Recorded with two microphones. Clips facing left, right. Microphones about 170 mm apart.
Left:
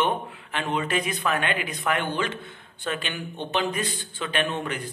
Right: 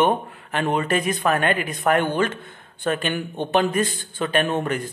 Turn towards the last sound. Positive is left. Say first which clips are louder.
# right 6 dB
turn(degrees=-45)  # may be behind; listen again after turning